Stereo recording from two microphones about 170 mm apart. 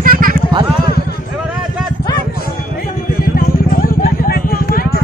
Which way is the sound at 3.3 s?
55° left (ahead or behind).